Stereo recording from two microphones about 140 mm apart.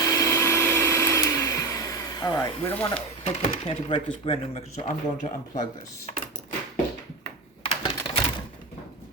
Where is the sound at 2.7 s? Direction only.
15° left (ahead or behind).